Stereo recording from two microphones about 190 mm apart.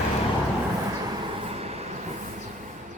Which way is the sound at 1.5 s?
35° right (ahead or behind).